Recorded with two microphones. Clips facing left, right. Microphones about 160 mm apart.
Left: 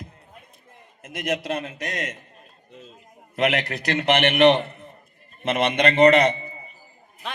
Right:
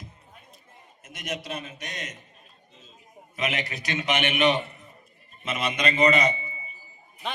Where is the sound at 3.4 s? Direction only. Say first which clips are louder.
Left 7 dB; 65° left (ahead or behind).